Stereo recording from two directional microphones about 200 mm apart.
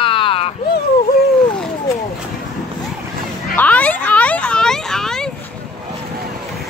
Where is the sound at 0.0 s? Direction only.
25° left (ahead or behind).